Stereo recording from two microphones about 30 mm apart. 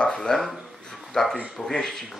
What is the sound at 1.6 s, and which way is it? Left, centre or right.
Speech, centre.